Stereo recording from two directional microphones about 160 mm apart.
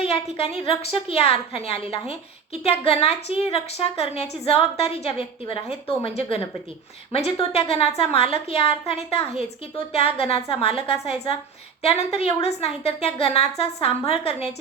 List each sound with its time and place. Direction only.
0.0 s a woman's voice: 40° left (ahead or behind)